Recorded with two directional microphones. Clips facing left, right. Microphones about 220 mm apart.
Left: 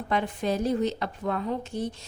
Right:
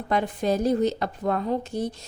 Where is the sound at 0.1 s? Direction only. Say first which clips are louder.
Right 3 dB; 40° right (ahead or behind).